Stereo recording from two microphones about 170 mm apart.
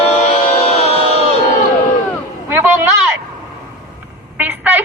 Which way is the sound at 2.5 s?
10° right (ahead or behind).